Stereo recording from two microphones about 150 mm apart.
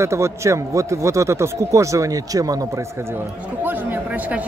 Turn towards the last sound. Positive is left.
turn(degrees=-10)  # may be behind; listen again after turning